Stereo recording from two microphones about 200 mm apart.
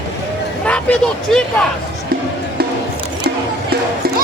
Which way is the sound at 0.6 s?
5° left (ahead or behind).